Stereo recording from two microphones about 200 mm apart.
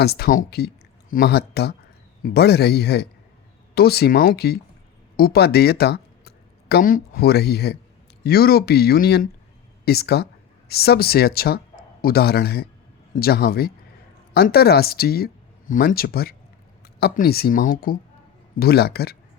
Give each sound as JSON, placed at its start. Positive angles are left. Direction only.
{"t": 0.0, "sound": "speech", "side_deg": 50}